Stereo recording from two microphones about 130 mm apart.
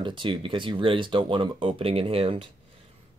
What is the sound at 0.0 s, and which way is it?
Speech, 40° right (ahead or behind).